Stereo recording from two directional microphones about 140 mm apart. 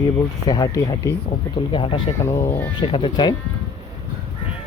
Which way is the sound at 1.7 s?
40° left (ahead or behind).